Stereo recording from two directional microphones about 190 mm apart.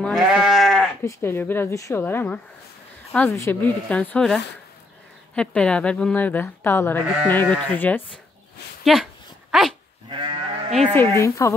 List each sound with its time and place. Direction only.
0.0 s sheep: centre (ahead or behind)
1.0 s speech: 10° left (ahead or behind)
8.8 s dog: centre (ahead or behind)
10.0 s sheep: 25° right (ahead or behind)
10.9 s speech: 10° left (ahead or behind)